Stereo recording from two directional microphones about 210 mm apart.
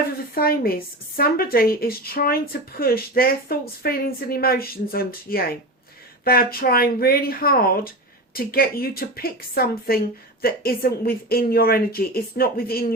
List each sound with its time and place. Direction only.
0.3 s a woman's voice: 45° left (ahead or behind)